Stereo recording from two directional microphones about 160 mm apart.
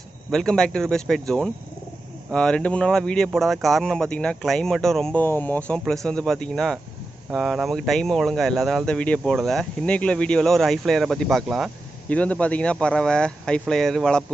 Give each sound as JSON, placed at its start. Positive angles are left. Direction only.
{"t": 0.3, "sound": "speech", "side_deg": 5}